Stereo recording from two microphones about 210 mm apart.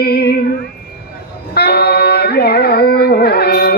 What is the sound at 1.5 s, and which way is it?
Carnatic music, 50° left (ahead or behind).